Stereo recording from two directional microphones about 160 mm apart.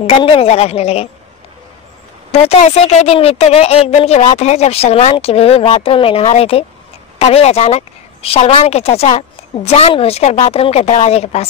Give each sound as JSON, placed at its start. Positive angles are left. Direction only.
{"t": 0.1, "sound": "a woman's voice", "side_deg": 35}
{"t": 2.3, "sound": "a woman's voice", "side_deg": 40}